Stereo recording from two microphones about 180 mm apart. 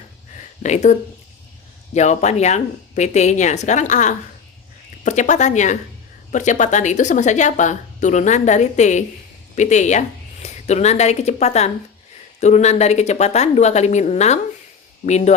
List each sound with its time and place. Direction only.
0.6 s speech: 40° left (ahead or behind)